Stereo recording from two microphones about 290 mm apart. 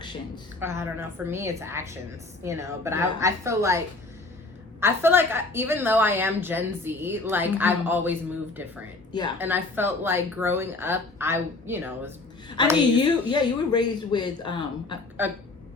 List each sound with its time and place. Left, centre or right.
0.6 s a woman's voice: centre
4.8 s a woman's voice: centre
12.6 s speech: centre